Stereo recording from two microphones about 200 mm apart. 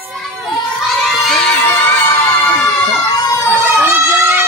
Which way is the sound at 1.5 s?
15° left (ahead or behind).